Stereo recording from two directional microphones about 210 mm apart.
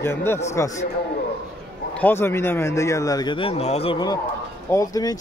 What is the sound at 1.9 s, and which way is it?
Speech, 10° left (ahead or behind).